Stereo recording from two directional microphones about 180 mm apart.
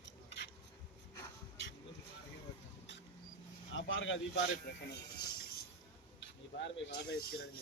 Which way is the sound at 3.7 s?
90° left.